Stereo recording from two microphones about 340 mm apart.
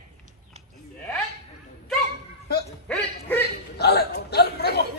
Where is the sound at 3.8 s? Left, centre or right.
Left.